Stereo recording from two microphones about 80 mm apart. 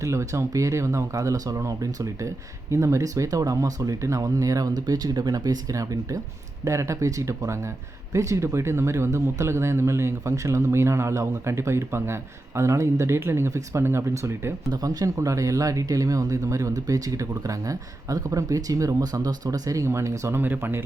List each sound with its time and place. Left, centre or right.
0.0 s speech: right
14.7 s speech: right
20.4 s speech: right